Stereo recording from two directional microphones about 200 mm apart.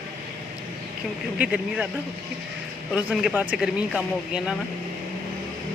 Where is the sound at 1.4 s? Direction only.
5° right (ahead or behind).